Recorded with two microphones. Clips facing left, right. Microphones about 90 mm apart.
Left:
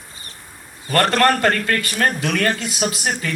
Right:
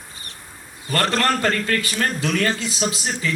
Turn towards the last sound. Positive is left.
turn(degrees=55)  # may be behind; listen again after turning